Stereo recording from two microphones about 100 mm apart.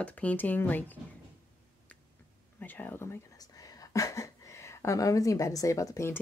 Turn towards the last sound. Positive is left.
turn(degrees=30)  # may be behind; listen again after turning